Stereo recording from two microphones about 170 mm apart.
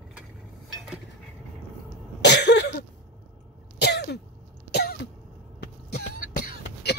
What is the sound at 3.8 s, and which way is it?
Throat clearing, 75° left (ahead or behind).